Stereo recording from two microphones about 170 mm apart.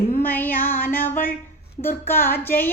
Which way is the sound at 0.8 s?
55° left (ahead or behind).